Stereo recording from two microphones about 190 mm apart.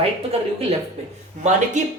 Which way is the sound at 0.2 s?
30° right (ahead or behind).